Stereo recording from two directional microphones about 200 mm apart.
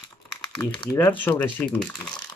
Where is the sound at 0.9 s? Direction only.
10° left (ahead or behind).